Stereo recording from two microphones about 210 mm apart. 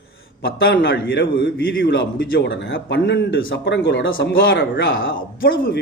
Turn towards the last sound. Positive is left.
turn(degrees=45)  # may be behind; listen again after turning